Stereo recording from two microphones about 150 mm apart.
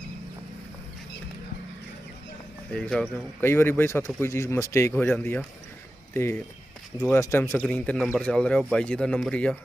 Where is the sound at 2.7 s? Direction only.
5° left (ahead or behind).